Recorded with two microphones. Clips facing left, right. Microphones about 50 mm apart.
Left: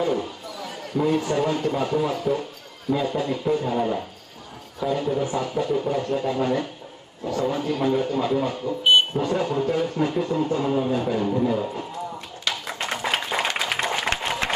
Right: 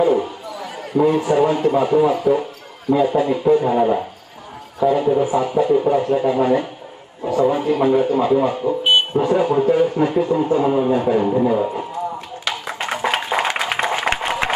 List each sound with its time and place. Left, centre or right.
0.0 s a man's voice: centre
4.7 s a man's voice: centre
12.4 s a sound: centre